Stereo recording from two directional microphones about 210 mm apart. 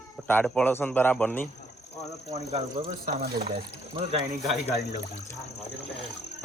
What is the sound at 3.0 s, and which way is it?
Speech, 45° right (ahead or behind).